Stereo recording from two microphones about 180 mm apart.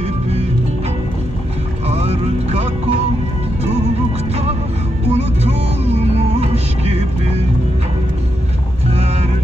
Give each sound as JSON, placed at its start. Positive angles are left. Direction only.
{"t": 1.9, "sound": "music", "side_deg": -35}
{"t": 5.1, "sound": "music", "side_deg": -35}